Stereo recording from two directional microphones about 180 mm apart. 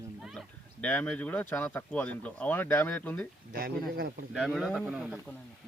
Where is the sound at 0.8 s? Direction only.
10° left (ahead or behind).